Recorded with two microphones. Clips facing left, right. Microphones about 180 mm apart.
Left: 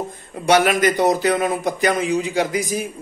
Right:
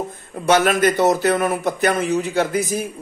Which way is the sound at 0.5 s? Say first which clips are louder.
Even; 15° left (ahead or behind).